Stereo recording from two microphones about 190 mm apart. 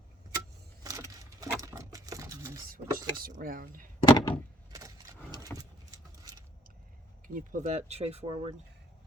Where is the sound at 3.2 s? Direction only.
50° right (ahead or behind).